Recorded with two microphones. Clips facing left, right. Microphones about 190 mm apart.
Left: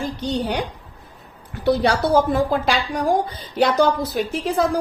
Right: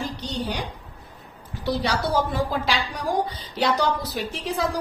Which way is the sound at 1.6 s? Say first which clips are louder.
Left 7 dB; 55° left (ahead or behind).